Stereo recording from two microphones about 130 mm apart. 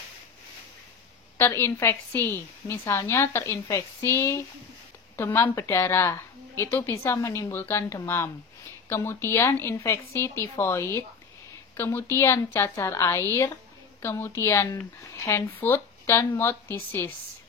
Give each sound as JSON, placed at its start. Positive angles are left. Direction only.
{"t": 1.4, "sound": "a woman's voice", "side_deg": 20}